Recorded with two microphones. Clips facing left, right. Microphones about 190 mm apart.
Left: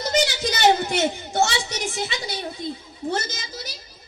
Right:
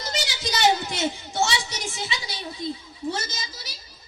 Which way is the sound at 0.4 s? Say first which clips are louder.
Even; 60° left (ahead or behind).